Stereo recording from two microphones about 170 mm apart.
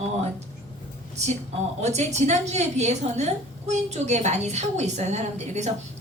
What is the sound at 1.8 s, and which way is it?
A woman's voice, 40° right (ahead or behind).